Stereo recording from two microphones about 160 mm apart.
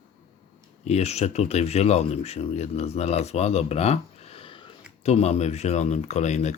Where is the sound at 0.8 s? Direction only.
45° left (ahead or behind).